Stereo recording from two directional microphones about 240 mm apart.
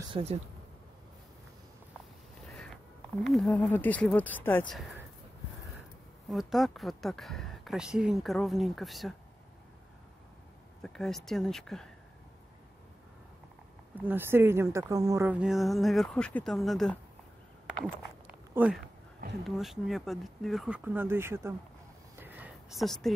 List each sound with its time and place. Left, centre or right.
0.1 s speech: right
2.4 s a sound: centre
3.3 s speech: centre
6.2 s speech: centre
10.8 s speech: centre
13.9 s speech: centre
18.2 s a sound: centre
19.4 s speech: centre
22.2 s a sound: centre